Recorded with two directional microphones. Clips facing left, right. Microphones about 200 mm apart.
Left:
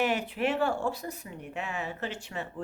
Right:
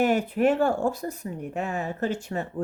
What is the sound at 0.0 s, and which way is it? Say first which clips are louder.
Speech: right 7 dB; 45° right (ahead or behind).